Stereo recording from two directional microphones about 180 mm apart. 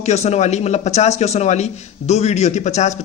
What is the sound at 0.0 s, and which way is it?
Speech, 35° left (ahead or behind).